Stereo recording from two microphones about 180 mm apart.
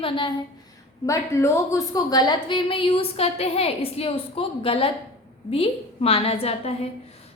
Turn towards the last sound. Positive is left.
turn(degrees=35)  # may be behind; listen again after turning